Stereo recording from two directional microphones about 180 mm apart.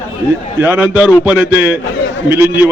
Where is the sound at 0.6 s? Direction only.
10° right (ahead or behind).